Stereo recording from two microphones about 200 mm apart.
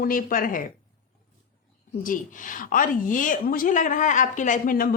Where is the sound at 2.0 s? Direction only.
45° left (ahead or behind).